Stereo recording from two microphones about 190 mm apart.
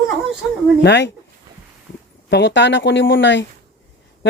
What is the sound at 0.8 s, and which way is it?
Speech, 70° left (ahead or behind).